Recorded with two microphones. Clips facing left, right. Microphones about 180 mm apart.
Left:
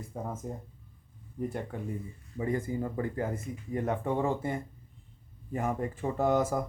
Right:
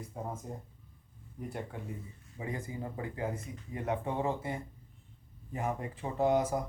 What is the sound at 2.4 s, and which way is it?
Speech, 50° left (ahead or behind).